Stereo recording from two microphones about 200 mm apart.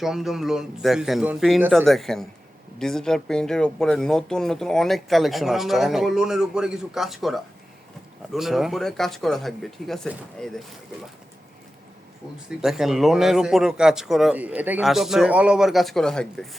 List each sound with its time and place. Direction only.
0.0 s speech: centre (ahead or behind)
12.5 s speech: 5° right (ahead or behind)